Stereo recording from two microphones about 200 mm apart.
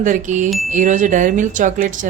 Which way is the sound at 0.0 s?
40° right (ahead or behind).